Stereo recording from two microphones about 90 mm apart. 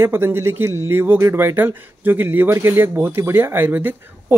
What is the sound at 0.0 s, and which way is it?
Speech, 25° right (ahead or behind).